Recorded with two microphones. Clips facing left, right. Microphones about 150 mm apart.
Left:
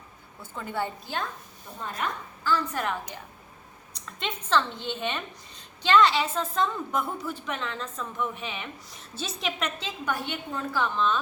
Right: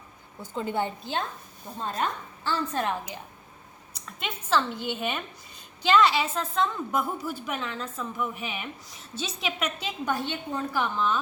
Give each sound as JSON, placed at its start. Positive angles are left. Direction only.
{"t": 0.4, "sound": "a woman's voice", "side_deg": -20}
{"t": 3.9, "sound": "a woman's voice", "side_deg": -5}
{"t": 10.1, "sound": "a woman's voice", "side_deg": -20}